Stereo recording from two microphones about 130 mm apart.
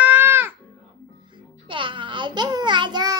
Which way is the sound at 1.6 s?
40° right (ahead or behind).